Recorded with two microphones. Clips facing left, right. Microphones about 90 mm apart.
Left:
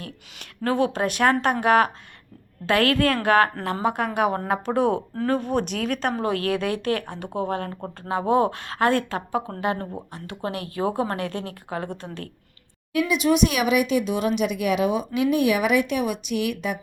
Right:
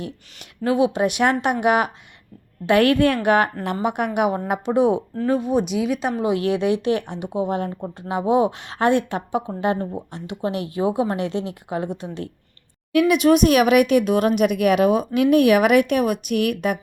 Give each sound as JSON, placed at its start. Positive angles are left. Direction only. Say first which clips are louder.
{"t": 0.6, "sound": "speech", "louder": "right 4 dB", "side_deg": -15}
{"t": 12.9, "sound": "speech", "louder": "right 5 dB", "side_deg": -60}